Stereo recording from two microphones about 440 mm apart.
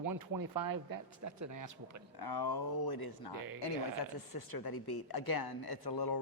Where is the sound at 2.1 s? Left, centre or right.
Left.